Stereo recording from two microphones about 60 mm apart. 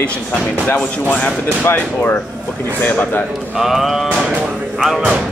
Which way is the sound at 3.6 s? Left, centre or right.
Centre.